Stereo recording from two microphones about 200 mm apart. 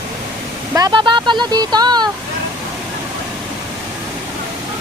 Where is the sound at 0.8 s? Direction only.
20° right (ahead or behind).